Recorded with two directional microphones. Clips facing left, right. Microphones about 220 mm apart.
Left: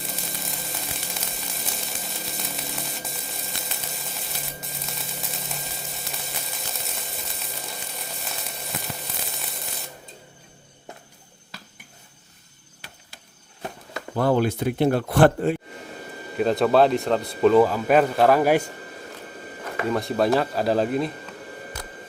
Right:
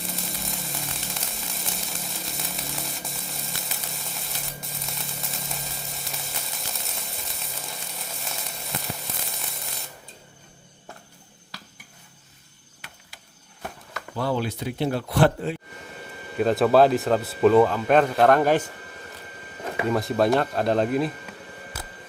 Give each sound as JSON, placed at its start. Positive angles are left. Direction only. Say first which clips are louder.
{"t": 0.0, "sound": "sizzle", "louder": "right 1 dB", "side_deg": 0}
{"t": 12.8, "sound": "a sound", "louder": "left 1 dB", "side_deg": 35}
{"t": 14.2, "sound": "a man's voice", "louder": "left 6 dB", "side_deg": 50}
{"t": 16.4, "sound": "speech", "louder": "right 1 dB", "side_deg": 0}
{"t": 19.9, "sound": "speech", "louder": "even", "side_deg": 0}